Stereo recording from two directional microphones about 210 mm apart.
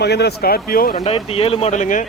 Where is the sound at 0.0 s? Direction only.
50° left (ahead or behind).